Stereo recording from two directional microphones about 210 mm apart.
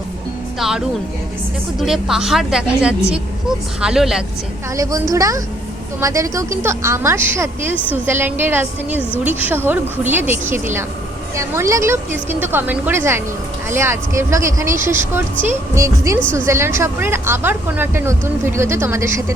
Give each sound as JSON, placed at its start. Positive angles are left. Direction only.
{"t": 1.8, "sound": "speech", "side_deg": 0}
{"t": 4.8, "sound": "speech", "side_deg": -15}